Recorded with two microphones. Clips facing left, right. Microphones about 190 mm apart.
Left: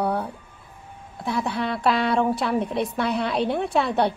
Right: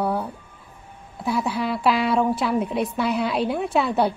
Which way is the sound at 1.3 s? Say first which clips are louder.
Right 2 dB; 5° right (ahead or behind).